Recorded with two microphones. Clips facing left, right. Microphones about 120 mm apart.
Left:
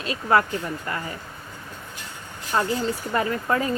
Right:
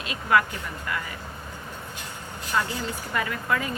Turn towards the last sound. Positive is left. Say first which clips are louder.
# left 4 dB
turn(degrees=35)  # may be behind; listen again after turning